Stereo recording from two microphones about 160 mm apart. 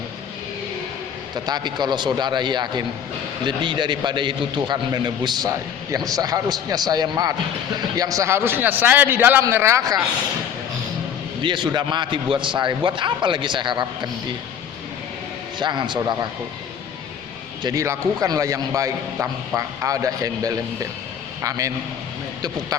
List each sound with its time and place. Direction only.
1.5 s a man's voice: 25° right (ahead or behind)
11.4 s a man's voice: 30° right (ahead or behind)
15.5 s a man's voice: 30° right (ahead or behind)
17.6 s a man's voice: 25° right (ahead or behind)